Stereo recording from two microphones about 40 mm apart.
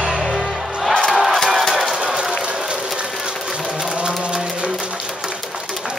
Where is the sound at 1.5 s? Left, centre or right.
Centre.